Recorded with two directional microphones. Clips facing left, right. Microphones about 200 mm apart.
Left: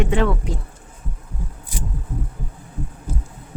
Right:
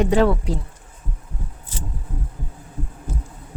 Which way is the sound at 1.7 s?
10° left (ahead or behind).